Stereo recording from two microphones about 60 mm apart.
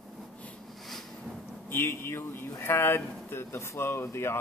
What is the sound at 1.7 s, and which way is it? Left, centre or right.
Speech, left.